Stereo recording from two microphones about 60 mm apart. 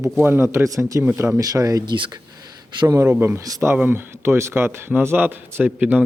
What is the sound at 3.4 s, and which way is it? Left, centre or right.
Speech, right.